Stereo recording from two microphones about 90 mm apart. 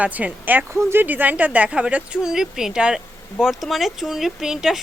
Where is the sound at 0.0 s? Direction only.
15° right (ahead or behind).